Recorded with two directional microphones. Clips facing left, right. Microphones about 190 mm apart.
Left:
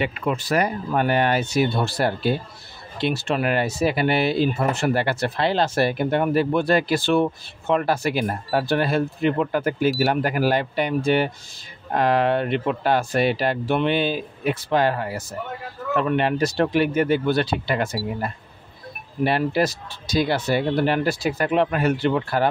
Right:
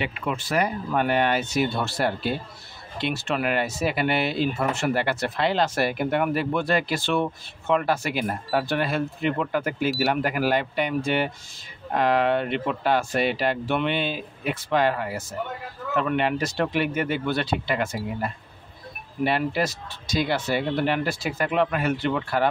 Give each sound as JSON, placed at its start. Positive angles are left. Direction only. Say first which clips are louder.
{"t": 0.0, "sound": "speech", "louder": "left 4 dB", "side_deg": 40}